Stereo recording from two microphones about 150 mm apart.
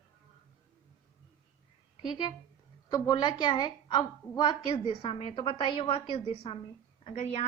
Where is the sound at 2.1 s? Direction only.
30° left (ahead or behind).